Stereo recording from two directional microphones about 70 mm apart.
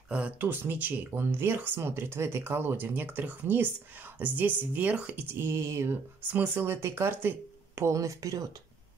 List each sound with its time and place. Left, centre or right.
0.4 s speech: right
5.3 s speech: right
6.3 s speech: right